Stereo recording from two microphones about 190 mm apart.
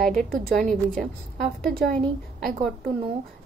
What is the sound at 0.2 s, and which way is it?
A woman's voice, centre (ahead or behind).